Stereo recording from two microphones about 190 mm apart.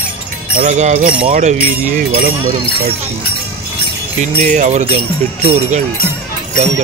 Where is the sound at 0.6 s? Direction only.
40° right (ahead or behind).